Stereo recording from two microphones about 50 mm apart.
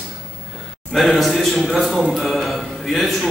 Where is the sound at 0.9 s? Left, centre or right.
Centre.